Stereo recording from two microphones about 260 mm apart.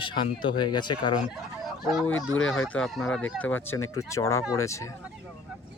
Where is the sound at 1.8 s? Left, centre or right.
Centre.